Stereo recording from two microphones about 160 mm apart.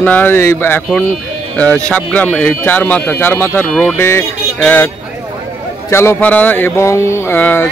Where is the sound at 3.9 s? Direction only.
15° left (ahead or behind).